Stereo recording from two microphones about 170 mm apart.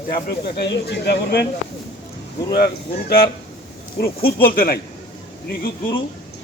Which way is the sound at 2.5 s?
65° left (ahead or behind).